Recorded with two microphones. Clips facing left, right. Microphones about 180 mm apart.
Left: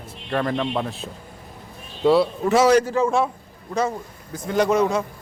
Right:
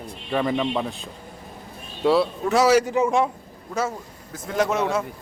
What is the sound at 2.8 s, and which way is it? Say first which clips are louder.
Speech: even; 15° right (ahead or behind).